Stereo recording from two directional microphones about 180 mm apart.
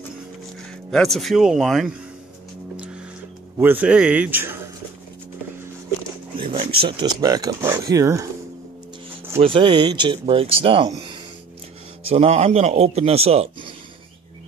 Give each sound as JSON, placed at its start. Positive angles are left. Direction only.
{"t": 0.9, "sound": "a man's voice", "side_deg": 0}
{"t": 3.5, "sound": "speech", "side_deg": -10}
{"t": 6.3, "sound": "speech", "side_deg": -30}
{"t": 9.4, "sound": "a man's voice", "side_deg": -30}